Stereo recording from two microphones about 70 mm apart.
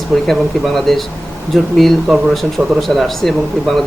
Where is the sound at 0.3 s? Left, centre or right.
Centre.